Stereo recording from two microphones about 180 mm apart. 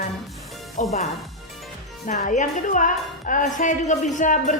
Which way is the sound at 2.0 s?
45° left (ahead or behind).